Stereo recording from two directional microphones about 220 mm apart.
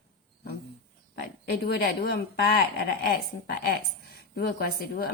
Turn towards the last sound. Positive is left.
turn(degrees=45)  # may be behind; listen again after turning